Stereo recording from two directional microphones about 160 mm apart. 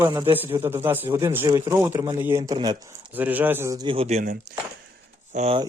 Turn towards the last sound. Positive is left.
turn(degrees=-45)  # may be behind; listen again after turning